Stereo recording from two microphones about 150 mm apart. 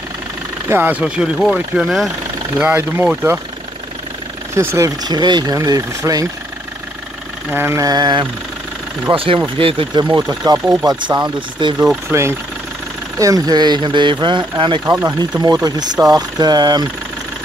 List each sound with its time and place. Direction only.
0.7 s speech: 15° right (ahead or behind)
4.6 s speech: 20° right (ahead or behind)
7.5 s speech: 15° right (ahead or behind)
12.1 s speech: 20° right (ahead or behind)